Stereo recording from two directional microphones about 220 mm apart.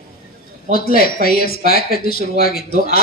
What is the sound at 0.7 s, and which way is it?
Speech, 40° left (ahead or behind).